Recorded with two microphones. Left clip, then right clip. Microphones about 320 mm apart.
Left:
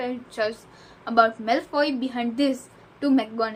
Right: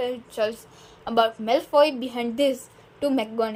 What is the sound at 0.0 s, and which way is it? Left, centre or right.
A woman's voice, right.